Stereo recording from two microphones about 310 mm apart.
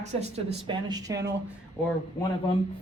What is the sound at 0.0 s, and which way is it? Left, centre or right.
Speech, right.